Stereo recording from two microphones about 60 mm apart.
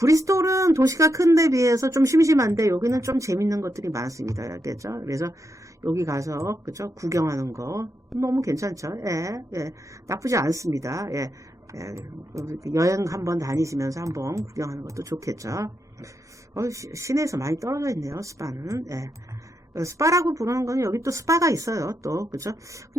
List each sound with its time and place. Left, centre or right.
0.0 s speech: right